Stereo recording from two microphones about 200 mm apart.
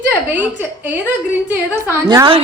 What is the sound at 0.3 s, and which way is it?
A woman's voice, 10° right (ahead or behind).